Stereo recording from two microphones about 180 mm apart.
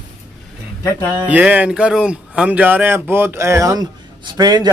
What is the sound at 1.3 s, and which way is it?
Speech, 10° right (ahead or behind).